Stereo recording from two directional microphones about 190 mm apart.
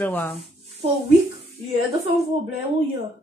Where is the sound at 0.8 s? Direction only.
35° right (ahead or behind).